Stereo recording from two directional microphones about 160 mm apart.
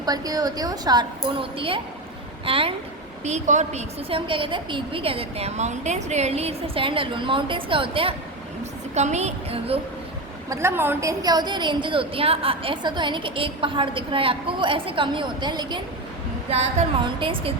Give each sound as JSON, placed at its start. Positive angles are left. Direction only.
{"t": 0.0, "sound": "a woman's voice", "side_deg": -25}
{"t": 3.2, "sound": "a woman's voice", "side_deg": -50}
{"t": 4.3, "sound": "a woman's voice", "side_deg": -30}
{"t": 9.0, "sound": "a woman's voice", "side_deg": -45}
{"t": 10.5, "sound": "a woman's voice", "side_deg": -15}
{"t": 17.0, "sound": "a woman's voice", "side_deg": -30}